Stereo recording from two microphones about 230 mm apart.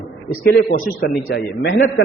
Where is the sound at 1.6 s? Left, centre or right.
Left.